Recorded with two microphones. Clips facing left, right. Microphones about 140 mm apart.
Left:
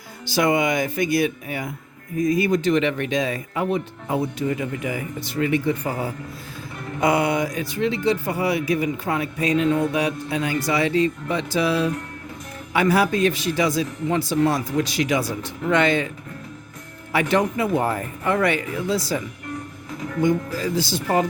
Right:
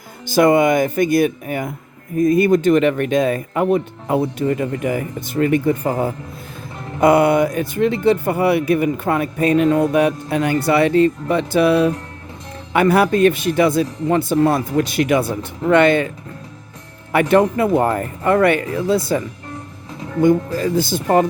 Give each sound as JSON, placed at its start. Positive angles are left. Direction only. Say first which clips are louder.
{"t": 0.3, "sound": "speech", "louder": "right 7 dB", "side_deg": -50}
{"t": 17.1, "sound": "speech", "louder": "right 6 dB", "side_deg": -55}
{"t": 20.2, "sound": "speech", "louder": "right 7 dB", "side_deg": -50}